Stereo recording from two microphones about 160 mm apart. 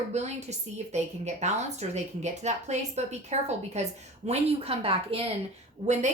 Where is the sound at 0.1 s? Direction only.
45° right (ahead or behind).